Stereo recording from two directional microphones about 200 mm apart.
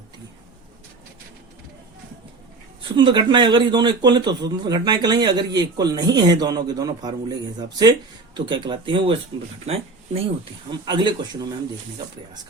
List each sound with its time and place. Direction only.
2.9 s a man's voice: 20° right (ahead or behind)